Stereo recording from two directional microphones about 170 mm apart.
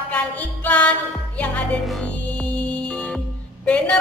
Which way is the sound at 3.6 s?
5° left (ahead or behind).